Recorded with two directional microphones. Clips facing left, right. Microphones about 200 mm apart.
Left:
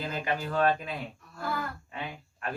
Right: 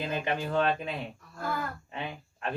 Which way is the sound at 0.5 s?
25° right (ahead or behind).